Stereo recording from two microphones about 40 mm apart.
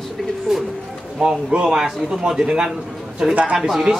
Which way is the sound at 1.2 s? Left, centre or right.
Right.